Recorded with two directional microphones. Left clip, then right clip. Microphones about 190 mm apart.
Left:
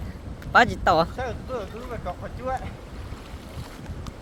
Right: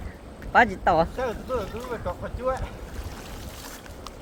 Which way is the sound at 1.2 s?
5° right (ahead or behind).